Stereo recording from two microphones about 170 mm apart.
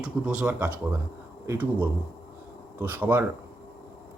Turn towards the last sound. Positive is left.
turn(degrees=-10)  # may be behind; listen again after turning